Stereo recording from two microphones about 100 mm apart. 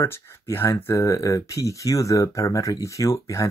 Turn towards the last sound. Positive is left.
turn(degrees=30)  # may be behind; listen again after turning